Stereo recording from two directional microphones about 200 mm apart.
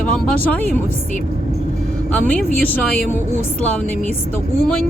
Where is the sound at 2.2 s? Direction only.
5° left (ahead or behind).